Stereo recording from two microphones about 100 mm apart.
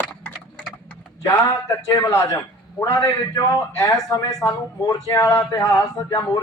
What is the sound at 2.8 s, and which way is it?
A man's voice, 30° left (ahead or behind).